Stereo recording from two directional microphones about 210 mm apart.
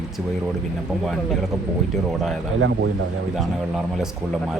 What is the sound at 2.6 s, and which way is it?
Speech, 80° right.